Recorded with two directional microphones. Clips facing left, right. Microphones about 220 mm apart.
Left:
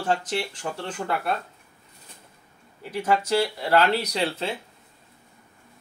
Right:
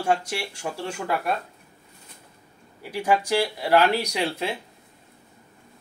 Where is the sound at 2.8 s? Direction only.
10° right (ahead or behind).